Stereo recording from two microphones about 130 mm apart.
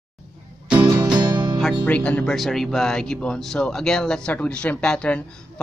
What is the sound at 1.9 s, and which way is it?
Speech, 10° left (ahead or behind).